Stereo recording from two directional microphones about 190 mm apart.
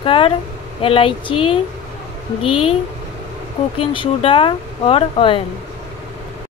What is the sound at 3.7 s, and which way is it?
Speech, 25° left (ahead or behind).